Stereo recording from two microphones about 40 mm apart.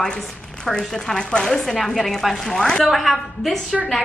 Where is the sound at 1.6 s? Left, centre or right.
Centre.